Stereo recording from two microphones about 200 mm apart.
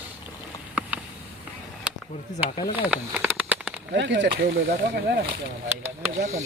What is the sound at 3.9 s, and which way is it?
Speech, 60° right (ahead or behind).